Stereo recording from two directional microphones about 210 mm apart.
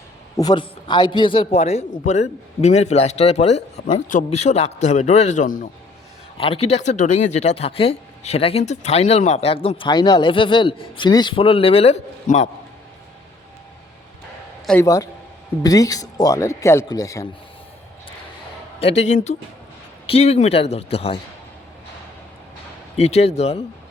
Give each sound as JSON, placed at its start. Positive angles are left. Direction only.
{"t": 0.3, "sound": "a man's voice", "side_deg": 20}
{"t": 14.7, "sound": "speech", "side_deg": 15}
{"t": 18.8, "sound": "a man's voice", "side_deg": 30}
{"t": 23.0, "sound": "a man's voice", "side_deg": 30}